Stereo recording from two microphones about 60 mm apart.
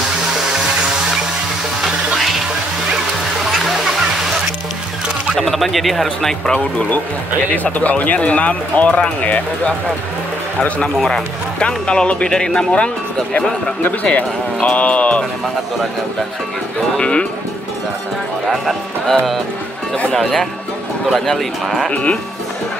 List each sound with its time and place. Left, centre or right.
3.5 s music: centre
5.4 s a man's voice: centre
7.5 s speech: left
11.0 s speech: centre
14.1 s speech: left
17.0 s speech: centre
19.0 s a man's voice: centre
21.9 s speech: left